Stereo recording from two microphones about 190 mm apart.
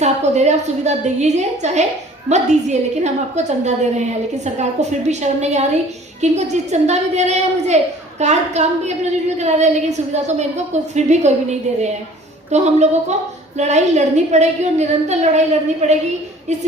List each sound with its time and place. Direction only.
0.0 s a woman's voice: 35° right (ahead or behind)
12.5 s a woman's voice: 35° right (ahead or behind)